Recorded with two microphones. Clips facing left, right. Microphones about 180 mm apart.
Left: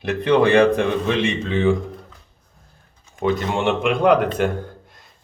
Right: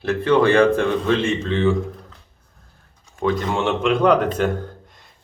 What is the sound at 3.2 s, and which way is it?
Speech, 15° left (ahead or behind).